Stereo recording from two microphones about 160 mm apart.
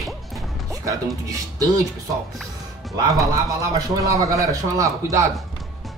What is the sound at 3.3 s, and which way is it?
Speech, 20° right (ahead or behind).